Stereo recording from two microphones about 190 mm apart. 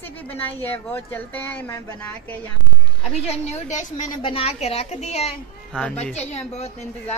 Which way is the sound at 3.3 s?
35° left (ahead or behind).